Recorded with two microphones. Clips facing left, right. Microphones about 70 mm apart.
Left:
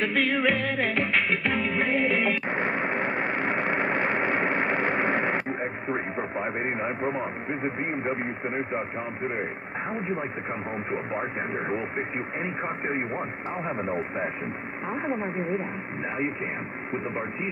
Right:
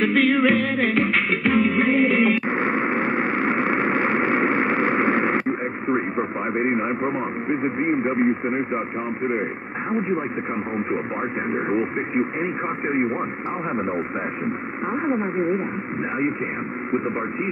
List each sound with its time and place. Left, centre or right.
0.0 s music: centre
6.6 s a man's voice: right
14.9 s a man's voice: right